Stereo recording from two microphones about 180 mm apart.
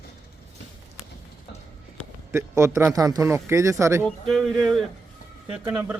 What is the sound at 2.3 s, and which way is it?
A man's voice, 15° right (ahead or behind).